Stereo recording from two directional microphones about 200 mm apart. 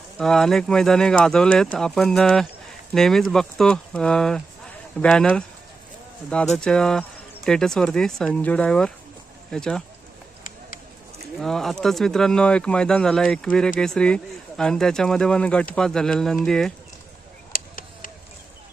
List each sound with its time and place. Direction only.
0.2 s speech: centre (ahead or behind)
6.6 s speech: 5° left (ahead or behind)
11.3 s speech: centre (ahead or behind)
17.5 s a sound: 45° left (ahead or behind)